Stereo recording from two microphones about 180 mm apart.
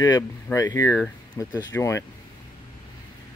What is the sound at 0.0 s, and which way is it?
Speech, 20° left (ahead or behind).